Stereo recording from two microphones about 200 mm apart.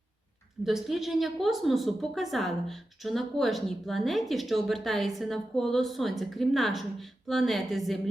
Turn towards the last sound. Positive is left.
turn(degrees=0)  # may be behind; listen again after turning